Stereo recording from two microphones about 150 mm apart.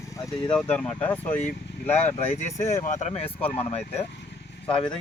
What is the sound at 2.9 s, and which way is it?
Speech, 45° left (ahead or behind).